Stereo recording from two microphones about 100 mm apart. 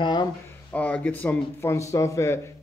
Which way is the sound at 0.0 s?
45° left (ahead or behind).